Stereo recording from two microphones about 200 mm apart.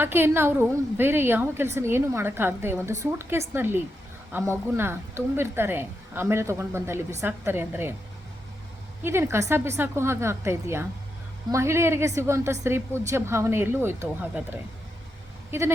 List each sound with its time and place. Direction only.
0.0 s a woman's voice: 10° right (ahead or behind)
9.0 s a woman's voice: 10° right (ahead or behind)